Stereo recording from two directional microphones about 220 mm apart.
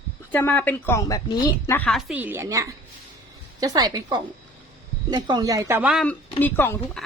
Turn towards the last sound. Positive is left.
turn(degrees=10)  # may be behind; listen again after turning